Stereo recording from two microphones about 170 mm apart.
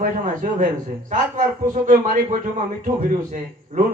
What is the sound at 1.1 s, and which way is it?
A man's voice, 50° right (ahead or behind).